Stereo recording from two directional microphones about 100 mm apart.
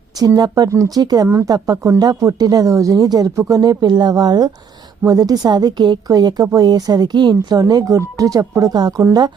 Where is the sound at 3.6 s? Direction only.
45° right (ahead or behind).